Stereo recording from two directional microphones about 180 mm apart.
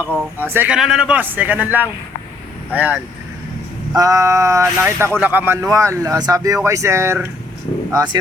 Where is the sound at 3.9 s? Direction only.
20° right (ahead or behind).